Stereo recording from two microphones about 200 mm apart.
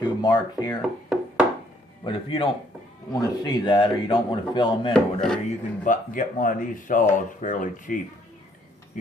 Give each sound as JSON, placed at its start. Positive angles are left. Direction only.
{"t": 0.0, "sound": "speech", "side_deg": 20}
{"t": 0.8, "sound": "a sound", "side_deg": -5}
{"t": 2.0, "sound": "a man's voice", "side_deg": 25}
{"t": 4.9, "sound": "speech", "side_deg": 0}
{"t": 5.8, "sound": "speech", "side_deg": 40}